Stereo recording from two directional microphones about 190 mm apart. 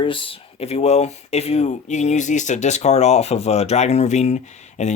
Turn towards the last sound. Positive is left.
turn(degrees=35)  # may be behind; listen again after turning